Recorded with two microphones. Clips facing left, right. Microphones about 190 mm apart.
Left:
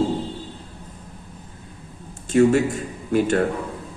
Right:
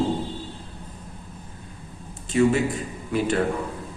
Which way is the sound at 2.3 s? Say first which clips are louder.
Left 4 dB; 50° left (ahead or behind).